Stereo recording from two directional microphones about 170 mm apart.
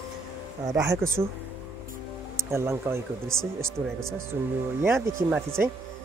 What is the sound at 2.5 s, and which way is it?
Speech, 15° right (ahead or behind).